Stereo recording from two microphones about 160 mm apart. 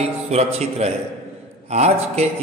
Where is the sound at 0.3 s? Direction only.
40° right (ahead or behind).